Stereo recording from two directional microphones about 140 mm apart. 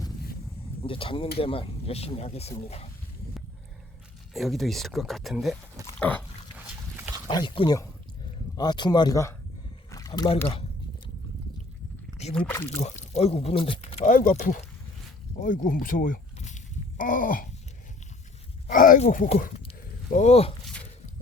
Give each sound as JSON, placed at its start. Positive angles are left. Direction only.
{"t": 0.8, "sound": "speech", "side_deg": 40}
{"t": 4.4, "sound": "speech", "side_deg": 0}
{"t": 6.0, "sound": "a sound", "side_deg": 10}
{"t": 7.3, "sound": "speech", "side_deg": 35}
{"t": 9.9, "sound": "slosh", "side_deg": 25}
{"t": 12.3, "sound": "speech", "side_deg": 10}
{"t": 12.6, "sound": "speech", "side_deg": 50}
{"t": 14.0, "sound": "speech", "side_deg": 70}
{"t": 18.7, "sound": "speech", "side_deg": 70}
{"t": 20.1, "sound": "speech", "side_deg": 60}